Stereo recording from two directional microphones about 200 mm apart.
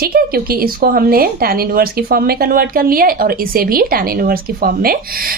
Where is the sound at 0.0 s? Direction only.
50° right (ahead or behind).